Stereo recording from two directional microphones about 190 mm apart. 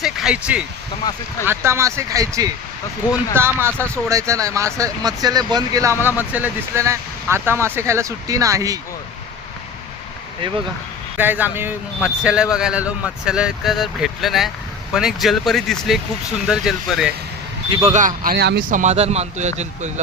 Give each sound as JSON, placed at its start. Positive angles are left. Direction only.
{"t": 0.0, "sound": "a sound", "side_deg": -5}
{"t": 1.5, "sound": "speech", "side_deg": -15}
{"t": 11.2, "sound": "speech", "side_deg": -10}
{"t": 17.7, "sound": "speech", "side_deg": -30}
{"t": 18.8, "sound": "a man's voice", "side_deg": -35}